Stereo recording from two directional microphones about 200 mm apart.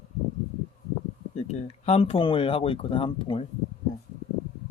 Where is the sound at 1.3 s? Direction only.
35° left (ahead or behind).